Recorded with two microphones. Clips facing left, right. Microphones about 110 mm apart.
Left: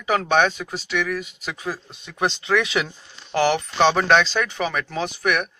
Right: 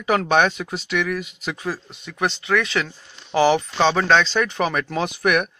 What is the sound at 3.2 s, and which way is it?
Speech, 10° right (ahead or behind).